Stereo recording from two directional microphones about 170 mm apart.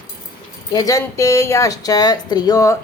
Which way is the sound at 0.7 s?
20° left (ahead or behind).